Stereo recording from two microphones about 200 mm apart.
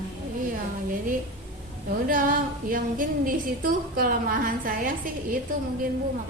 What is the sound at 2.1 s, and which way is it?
A woman's voice, 45° right (ahead or behind).